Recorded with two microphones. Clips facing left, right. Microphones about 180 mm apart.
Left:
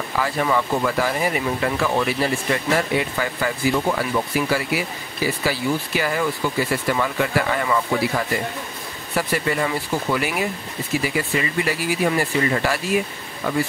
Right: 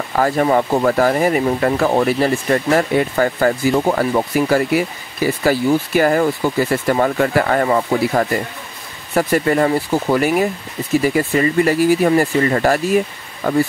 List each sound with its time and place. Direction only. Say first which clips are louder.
0.2 s speech: right 7 dB; 45° right (ahead or behind)